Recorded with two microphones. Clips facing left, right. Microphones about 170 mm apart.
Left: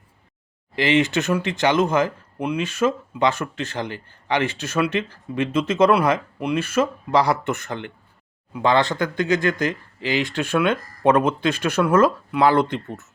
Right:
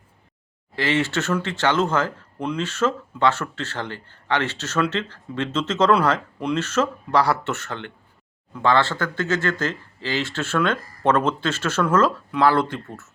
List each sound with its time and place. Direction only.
0.8 s speech: 15° left (ahead or behind)